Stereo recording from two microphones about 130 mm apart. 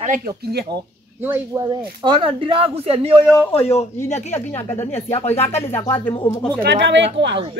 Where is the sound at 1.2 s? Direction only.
15° right (ahead or behind).